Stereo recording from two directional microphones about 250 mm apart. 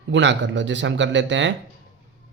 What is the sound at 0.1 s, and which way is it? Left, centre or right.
Speech, right.